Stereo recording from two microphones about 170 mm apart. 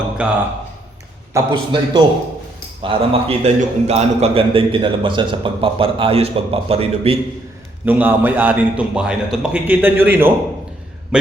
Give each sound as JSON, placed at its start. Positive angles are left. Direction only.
{"t": 0.2, "sound": "a man's voice", "side_deg": -5}
{"t": 1.3, "sound": "a man's voice", "side_deg": -25}
{"t": 7.9, "sound": "a man's voice", "side_deg": -10}